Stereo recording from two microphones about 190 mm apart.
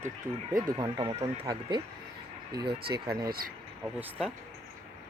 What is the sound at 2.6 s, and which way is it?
Speech, 55° right (ahead or behind).